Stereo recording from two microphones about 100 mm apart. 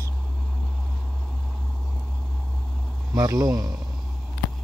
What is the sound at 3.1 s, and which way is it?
Speech, 40° right (ahead or behind).